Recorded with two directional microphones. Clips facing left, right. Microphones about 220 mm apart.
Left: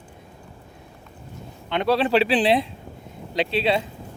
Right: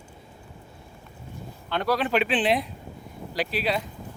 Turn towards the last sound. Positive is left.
turn(degrees=25)  # may be behind; listen again after turning